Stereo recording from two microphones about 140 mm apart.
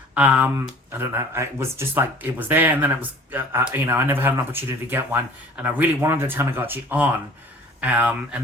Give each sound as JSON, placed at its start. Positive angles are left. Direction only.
{"t": 0.1, "sound": "speech", "side_deg": -10}